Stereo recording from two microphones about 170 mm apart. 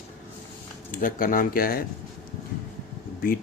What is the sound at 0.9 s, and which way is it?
Speech, 50° left (ahead or behind).